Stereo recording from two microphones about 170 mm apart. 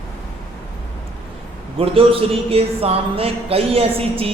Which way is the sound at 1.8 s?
35° right (ahead or behind).